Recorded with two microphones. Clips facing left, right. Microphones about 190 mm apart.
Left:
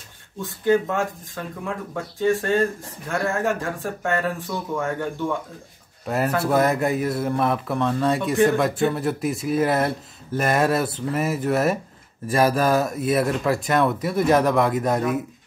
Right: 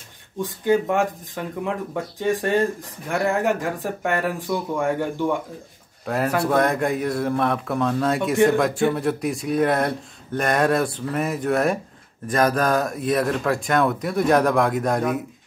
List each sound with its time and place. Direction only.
0.4 s speech: 15° right (ahead or behind)
6.0 s speech: 5° left (ahead or behind)